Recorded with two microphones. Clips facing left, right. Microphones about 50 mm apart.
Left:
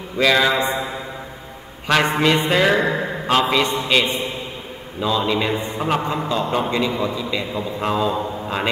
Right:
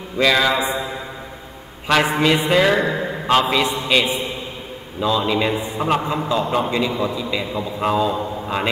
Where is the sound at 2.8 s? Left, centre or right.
Left.